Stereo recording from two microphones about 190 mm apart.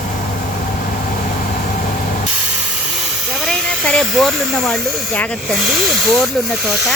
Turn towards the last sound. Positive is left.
turn(degrees=0)  # may be behind; listen again after turning